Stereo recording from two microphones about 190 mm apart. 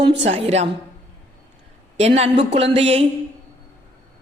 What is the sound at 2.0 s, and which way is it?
A man's voice, 35° right (ahead or behind).